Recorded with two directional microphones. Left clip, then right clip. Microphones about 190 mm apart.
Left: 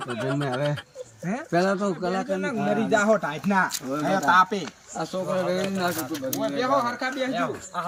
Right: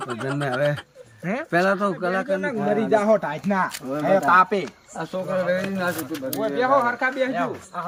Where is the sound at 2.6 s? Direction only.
5° left (ahead or behind).